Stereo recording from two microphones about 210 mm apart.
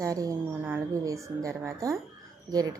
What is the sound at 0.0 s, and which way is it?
Speech, 15° right (ahead or behind).